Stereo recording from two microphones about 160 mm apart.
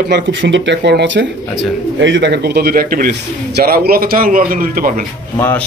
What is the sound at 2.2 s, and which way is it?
A man's voice, 90° right.